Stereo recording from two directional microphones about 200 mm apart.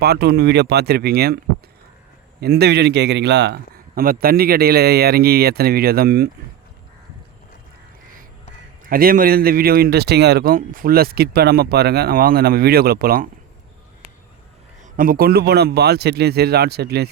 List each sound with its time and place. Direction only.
0.0 s speech: 55° right (ahead or behind)
2.4 s speech: 55° right (ahead or behind)
8.8 s speech: 45° right (ahead or behind)
14.9 s speech: 45° right (ahead or behind)